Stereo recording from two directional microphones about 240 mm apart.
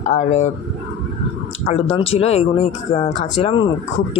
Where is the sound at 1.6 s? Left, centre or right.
Left.